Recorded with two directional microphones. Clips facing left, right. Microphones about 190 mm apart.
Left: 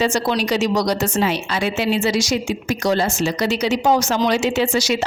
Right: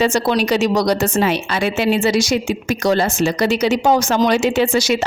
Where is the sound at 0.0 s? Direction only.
55° right (ahead or behind).